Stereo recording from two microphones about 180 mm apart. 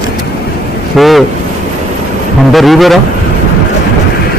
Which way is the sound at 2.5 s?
Centre (ahead or behind).